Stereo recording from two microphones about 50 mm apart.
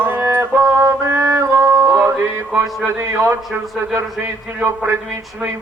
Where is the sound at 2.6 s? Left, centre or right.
Right.